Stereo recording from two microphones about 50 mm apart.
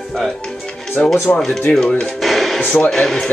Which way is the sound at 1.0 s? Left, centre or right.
Left.